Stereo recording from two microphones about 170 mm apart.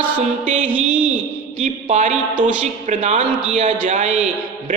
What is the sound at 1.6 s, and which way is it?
A man's voice, 45° right (ahead or behind).